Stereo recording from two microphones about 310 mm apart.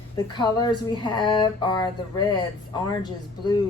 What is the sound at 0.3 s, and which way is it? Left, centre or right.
Speech, centre.